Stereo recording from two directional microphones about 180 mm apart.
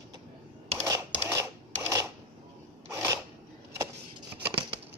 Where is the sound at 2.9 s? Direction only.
15° right (ahead or behind).